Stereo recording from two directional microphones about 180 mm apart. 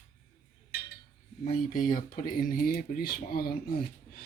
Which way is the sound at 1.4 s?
50° left (ahead or behind).